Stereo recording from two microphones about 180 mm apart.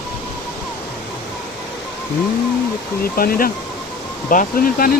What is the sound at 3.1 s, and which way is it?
Speech, 55° left (ahead or behind).